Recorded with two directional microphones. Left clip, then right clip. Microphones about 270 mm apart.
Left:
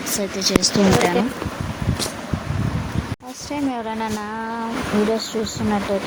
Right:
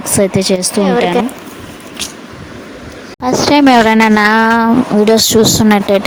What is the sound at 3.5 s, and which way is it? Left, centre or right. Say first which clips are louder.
Speech: right 17 dB; right.